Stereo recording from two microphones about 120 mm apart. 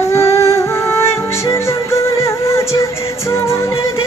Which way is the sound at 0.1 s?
25° left (ahead or behind).